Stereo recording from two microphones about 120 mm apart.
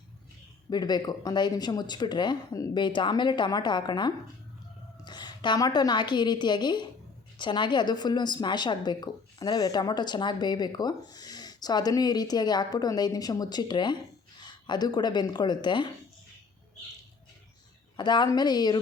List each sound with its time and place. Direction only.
0.7 s a woman's voice: 35° left (ahead or behind)
17.9 s a woman's voice: 40° left (ahead or behind)